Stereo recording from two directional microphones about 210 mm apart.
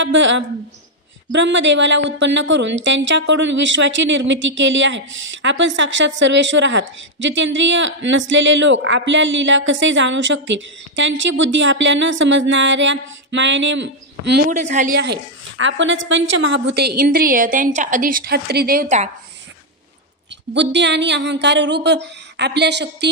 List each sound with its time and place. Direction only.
0.0 s a woman's voice: 60° right (ahead or behind)
14.6 s speech: 35° right (ahead or behind)
15.0 s a woman's voice: 60° right (ahead or behind); by 19.0 s 40° right (ahead or behind)
20.5 s a woman's voice: 55° right (ahead or behind)